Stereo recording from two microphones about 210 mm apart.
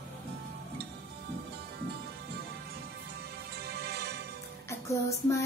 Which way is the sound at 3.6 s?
50° right (ahead or behind).